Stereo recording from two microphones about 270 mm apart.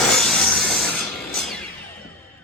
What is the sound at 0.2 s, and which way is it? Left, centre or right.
Music, centre.